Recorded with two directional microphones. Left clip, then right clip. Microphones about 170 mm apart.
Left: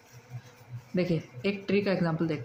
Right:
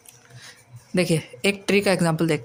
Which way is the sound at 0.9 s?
55° right (ahead or behind).